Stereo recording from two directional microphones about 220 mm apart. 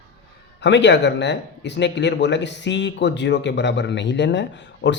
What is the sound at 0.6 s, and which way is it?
Speech, 55° left (ahead or behind).